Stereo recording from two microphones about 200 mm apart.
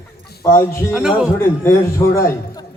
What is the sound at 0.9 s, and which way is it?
Speech, 5° right (ahead or behind).